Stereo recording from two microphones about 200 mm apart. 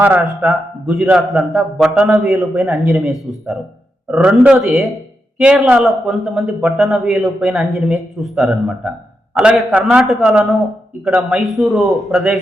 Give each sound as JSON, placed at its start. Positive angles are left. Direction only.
{"t": 0.0, "sound": "a man's voice", "side_deg": -10}